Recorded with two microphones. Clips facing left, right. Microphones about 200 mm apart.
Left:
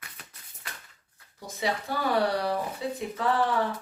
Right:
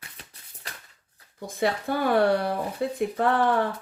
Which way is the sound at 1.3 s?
55° right (ahead or behind).